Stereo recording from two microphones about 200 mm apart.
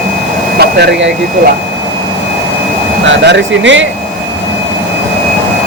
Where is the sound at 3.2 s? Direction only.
60° right (ahead or behind).